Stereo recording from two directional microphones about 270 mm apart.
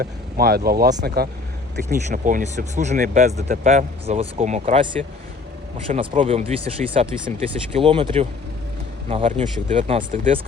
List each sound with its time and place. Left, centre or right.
0.0 s speech: right
5.9 s speech: right